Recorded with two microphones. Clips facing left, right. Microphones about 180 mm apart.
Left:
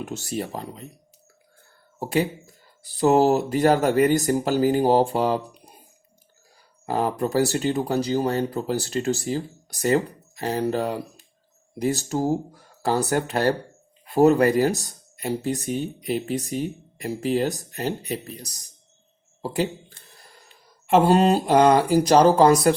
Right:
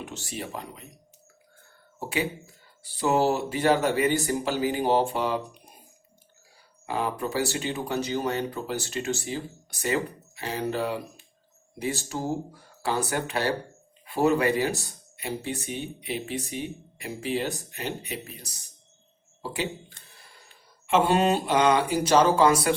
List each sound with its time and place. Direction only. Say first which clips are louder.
0.0 s speech: left 7 dB; 40° left (ahead or behind)
2.0 s speech: left 6 dB; 40° left (ahead or behind)
6.8 s speech: left 5 dB; 40° left (ahead or behind)
20.8 s speech: left 5 dB; 40° left (ahead or behind)